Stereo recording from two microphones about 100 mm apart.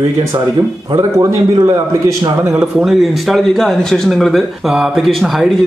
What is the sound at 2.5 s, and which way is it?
Speech, 5° right (ahead or behind).